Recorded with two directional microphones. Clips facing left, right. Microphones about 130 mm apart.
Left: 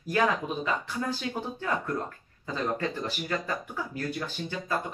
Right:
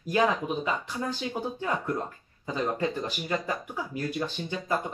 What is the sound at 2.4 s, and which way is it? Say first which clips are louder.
Speech: right 2 dB; 15° right (ahead or behind).